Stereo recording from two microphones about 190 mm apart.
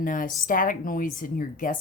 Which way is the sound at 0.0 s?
45° left (ahead or behind).